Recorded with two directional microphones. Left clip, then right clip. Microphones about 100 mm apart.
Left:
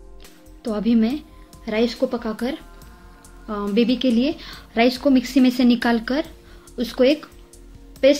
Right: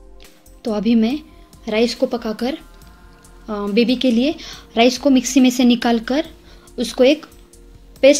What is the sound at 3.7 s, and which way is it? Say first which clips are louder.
Speech: right 3 dB; 45° right (ahead or behind).